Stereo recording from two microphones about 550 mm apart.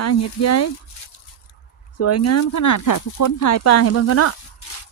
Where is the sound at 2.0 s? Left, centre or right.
Left.